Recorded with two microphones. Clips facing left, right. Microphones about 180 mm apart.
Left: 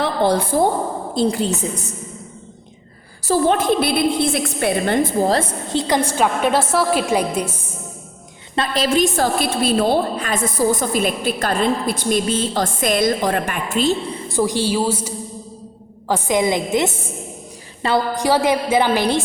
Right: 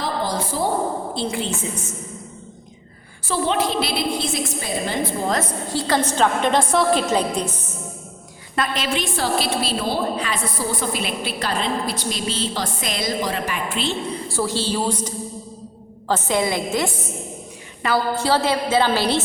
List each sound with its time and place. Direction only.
0.0 s a woman's voice: 65° left (ahead or behind)
1.1 s a woman's voice: 40° left (ahead or behind)
3.2 s a woman's voice: 45° left (ahead or behind)
5.2 s a woman's voice: 30° left (ahead or behind)
5.7 s a woman's voice: 15° left (ahead or behind)
8.5 s a woman's voice: 30° left (ahead or behind)
14.3 s a woman's voice: 15° left (ahead or behind)